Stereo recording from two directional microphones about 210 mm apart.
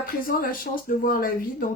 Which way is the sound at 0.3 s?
40° left (ahead or behind).